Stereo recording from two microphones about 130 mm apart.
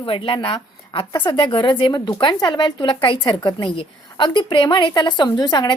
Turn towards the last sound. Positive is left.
turn(degrees=35)  # may be behind; listen again after turning